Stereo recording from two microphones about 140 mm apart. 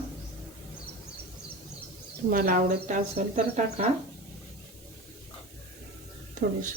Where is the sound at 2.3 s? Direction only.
85° right; by 3.8 s 60° right (ahead or behind).